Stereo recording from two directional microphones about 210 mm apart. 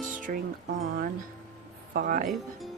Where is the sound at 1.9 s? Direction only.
45° right (ahead or behind).